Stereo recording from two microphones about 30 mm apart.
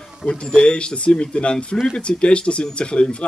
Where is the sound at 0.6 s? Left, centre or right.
Left.